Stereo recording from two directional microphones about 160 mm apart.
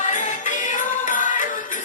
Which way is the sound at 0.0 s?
50° left (ahead or behind).